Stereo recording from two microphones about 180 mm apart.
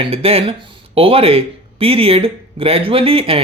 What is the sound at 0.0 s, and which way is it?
Speech, 35° right (ahead or behind).